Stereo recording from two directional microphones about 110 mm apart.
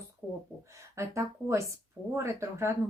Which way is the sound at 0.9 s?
25° right (ahead or behind).